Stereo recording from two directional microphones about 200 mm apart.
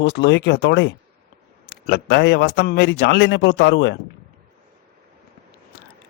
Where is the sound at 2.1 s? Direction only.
55° left (ahead or behind).